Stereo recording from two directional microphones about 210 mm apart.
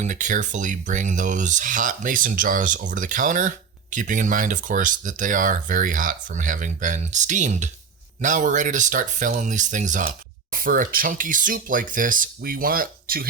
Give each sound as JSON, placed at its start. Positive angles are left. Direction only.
{"t": 0.0, "sound": "speech", "side_deg": -35}